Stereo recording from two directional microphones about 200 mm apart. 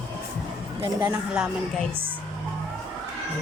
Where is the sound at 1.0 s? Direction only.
5° right (ahead or behind).